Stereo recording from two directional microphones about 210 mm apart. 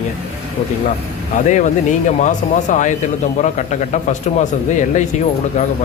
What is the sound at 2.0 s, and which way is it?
Speech, 35° left (ahead or behind).